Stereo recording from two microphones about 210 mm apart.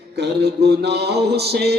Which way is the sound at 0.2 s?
50° right (ahead or behind).